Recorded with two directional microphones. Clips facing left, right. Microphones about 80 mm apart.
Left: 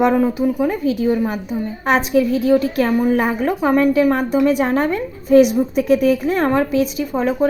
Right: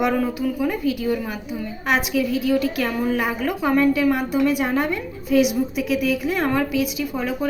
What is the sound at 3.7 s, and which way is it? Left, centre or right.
A woman's voice, left.